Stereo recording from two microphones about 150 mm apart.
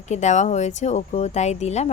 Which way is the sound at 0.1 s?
50° left (ahead or behind).